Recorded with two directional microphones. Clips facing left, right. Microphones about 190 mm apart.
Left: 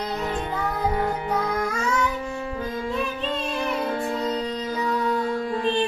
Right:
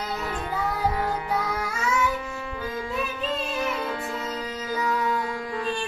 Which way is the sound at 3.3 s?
30° left (ahead or behind).